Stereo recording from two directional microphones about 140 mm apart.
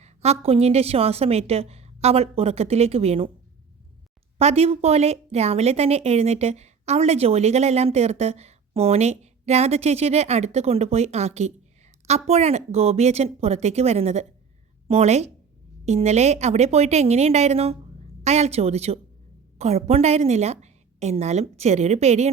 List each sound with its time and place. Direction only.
0.0 s a woman's voice: 50° right (ahead or behind)
4.4 s a woman's voice: 50° right (ahead or behind)